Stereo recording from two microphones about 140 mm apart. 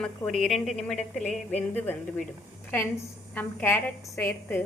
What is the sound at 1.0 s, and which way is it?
Speech, 55° left (ahead or behind).